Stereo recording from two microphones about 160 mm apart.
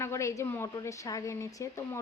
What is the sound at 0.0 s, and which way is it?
Speech, 15° left (ahead or behind).